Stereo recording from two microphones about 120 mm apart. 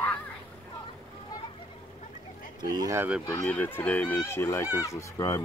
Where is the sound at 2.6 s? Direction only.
30° right (ahead or behind).